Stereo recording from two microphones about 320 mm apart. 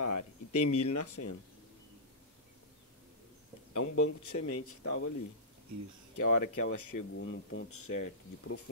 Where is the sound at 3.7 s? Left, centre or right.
Left.